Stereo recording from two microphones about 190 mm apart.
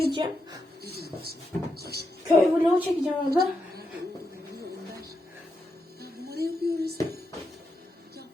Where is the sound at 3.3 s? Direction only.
55° right (ahead or behind).